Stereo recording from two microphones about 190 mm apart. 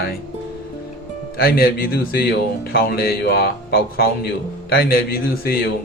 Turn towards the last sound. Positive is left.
turn(degrees=55)  # may be behind; listen again after turning